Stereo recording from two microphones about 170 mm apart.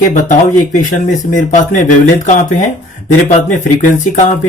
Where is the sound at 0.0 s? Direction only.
45° left (ahead or behind).